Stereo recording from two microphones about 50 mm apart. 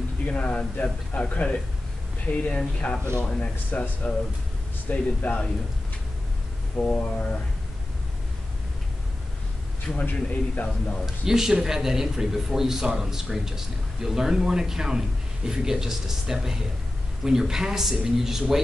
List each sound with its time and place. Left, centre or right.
0.2 s speech: left
2.3 s speech: left
4.8 s a man's voice: left
6.8 s speech: left
9.9 s a man's voice: left
11.2 s speech: centre